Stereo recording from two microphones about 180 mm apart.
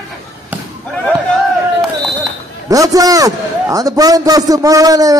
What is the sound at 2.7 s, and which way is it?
A man's voice, 20° right (ahead or behind).